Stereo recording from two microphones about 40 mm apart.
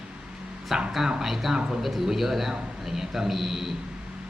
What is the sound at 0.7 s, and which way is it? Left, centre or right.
A man's voice, centre.